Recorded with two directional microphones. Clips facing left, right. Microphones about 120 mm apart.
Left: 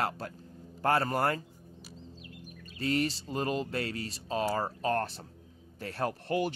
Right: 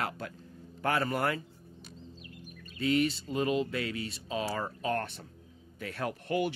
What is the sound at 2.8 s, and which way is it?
Speech, 40° left (ahead or behind).